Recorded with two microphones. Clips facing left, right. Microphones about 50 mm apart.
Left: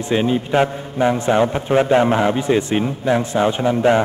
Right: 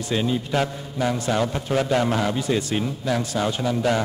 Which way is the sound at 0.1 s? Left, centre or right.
Left.